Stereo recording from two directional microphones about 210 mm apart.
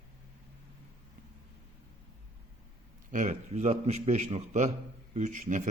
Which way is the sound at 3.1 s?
35° right (ahead or behind).